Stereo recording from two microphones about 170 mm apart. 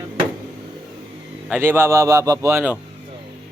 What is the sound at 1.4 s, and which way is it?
A man's voice, 10° right (ahead or behind).